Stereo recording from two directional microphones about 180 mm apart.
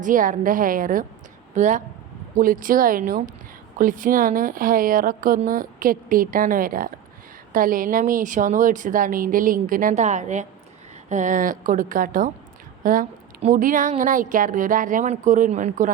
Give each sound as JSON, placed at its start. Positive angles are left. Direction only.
{"t": 0.0, "sound": "a woman's voice", "side_deg": -45}